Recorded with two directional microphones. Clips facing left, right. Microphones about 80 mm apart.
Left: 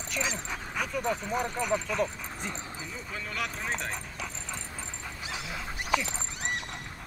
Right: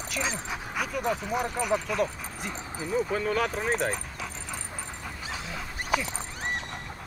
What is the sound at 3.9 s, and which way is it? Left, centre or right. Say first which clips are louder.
Dog: right 2 dB; centre.